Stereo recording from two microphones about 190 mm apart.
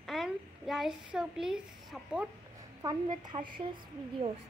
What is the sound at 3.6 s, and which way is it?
Speech, 30° right (ahead or behind).